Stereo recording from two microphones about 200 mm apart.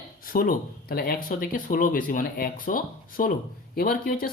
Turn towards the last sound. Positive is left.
turn(degrees=45)  # may be behind; listen again after turning